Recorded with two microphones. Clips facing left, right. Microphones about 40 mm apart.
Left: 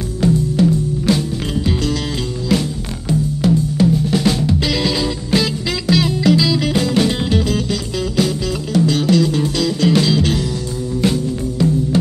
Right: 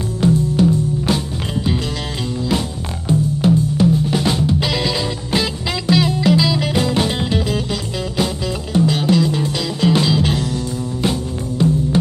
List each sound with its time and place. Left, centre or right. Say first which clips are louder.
4.1 s drum kit: left 1 dB; centre
4.7 s music: left 2 dB; centre